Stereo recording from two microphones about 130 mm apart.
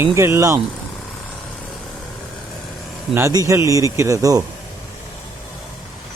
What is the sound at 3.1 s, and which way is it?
Speech, 25° right (ahead or behind).